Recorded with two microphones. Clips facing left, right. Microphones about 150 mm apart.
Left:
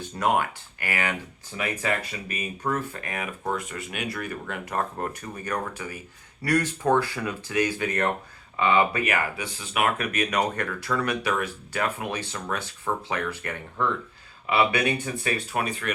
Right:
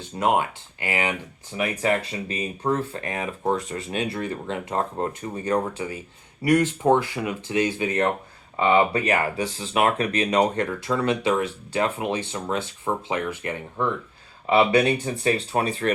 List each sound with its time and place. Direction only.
0.2 s speech: 20° right (ahead or behind)
14.4 s speech: 30° right (ahead or behind)